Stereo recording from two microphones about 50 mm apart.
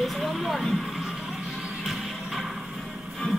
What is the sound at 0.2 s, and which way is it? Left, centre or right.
Vehicle, centre.